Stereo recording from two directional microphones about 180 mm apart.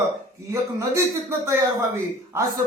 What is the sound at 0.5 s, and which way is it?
Speech, 15° right (ahead or behind).